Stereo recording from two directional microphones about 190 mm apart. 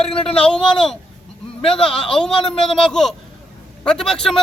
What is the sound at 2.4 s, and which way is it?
Speech, 30° left (ahead or behind).